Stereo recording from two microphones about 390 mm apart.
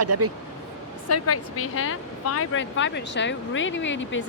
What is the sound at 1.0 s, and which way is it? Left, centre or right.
Speech, left.